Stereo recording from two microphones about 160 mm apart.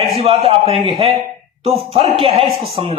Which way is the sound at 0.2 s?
40° right (ahead or behind).